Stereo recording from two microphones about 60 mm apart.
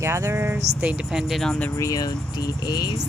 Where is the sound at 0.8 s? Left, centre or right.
Centre.